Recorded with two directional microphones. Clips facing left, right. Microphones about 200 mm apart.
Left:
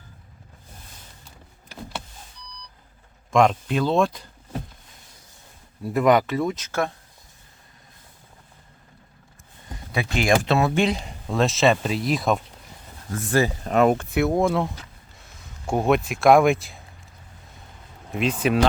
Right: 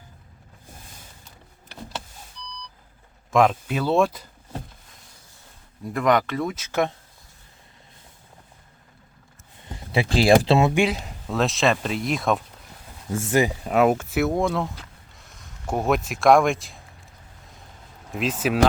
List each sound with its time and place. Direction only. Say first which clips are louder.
3.3 s speech: left 1 dB; 5° right (ahead or behind)
5.8 s speech: left 3 dB; 5° left (ahead or behind)
6.7 s speech: right 2 dB; 15° right (ahead or behind)
9.7 s speech: right 4 dB; 30° right (ahead or behind)
10.8 s speech: even; 5° right (ahead or behind)
13.1 s speech: right 1 dB; 20° right (ahead or behind)
13.7 s speech: even; 5° right (ahead or behind)
15.2 s a sound: left 1 dB; centre (ahead or behind)
16.0 s speech: left 1 dB; centre (ahead or behind)
18.1 s speech: left 2 dB; centre (ahead or behind)